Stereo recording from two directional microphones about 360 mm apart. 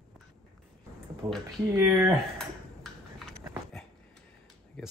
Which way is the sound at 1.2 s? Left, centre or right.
Centre.